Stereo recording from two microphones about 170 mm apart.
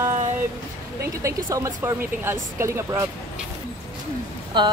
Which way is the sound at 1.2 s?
20° right (ahead or behind).